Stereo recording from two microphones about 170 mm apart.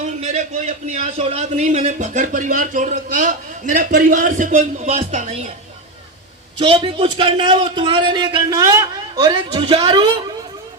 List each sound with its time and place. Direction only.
0.0 s a man's voice: 45° right (ahead or behind)
6.6 s a man's voice: 30° right (ahead or behind)